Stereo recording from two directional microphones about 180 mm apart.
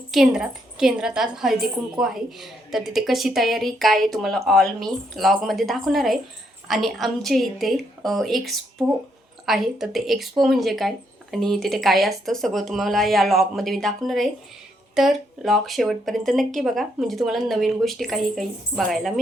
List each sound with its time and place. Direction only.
0.1 s speech: centre (ahead or behind)